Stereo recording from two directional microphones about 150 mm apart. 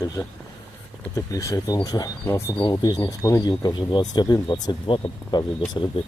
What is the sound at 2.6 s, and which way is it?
Speech, 30° left (ahead or behind).